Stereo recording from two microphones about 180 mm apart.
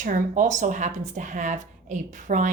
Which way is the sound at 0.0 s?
45° right (ahead or behind).